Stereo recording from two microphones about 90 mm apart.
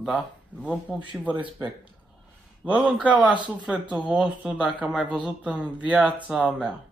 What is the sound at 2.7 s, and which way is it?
Speech, 15° right (ahead or behind).